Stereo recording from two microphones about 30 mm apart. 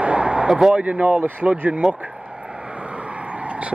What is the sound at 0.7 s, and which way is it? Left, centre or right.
Speech, right.